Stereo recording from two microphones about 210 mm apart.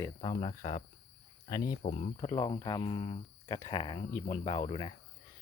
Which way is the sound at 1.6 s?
45° left (ahead or behind).